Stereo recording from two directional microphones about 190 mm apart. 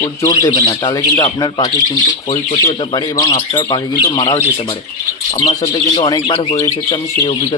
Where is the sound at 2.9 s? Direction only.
20° left (ahead or behind).